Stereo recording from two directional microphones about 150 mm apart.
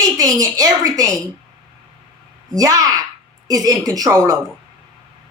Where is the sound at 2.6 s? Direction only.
25° right (ahead or behind).